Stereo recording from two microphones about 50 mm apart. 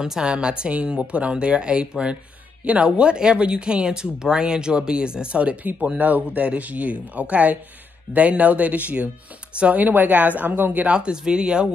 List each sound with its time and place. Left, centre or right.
0.0 s speech: centre; by 10.9 s right
10.9 s speech: centre